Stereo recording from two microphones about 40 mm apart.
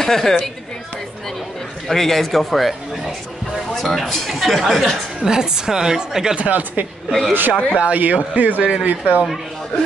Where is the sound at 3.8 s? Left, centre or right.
Centre.